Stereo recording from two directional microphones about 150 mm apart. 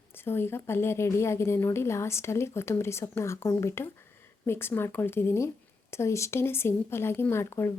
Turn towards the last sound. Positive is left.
turn(degrees=15)  # may be behind; listen again after turning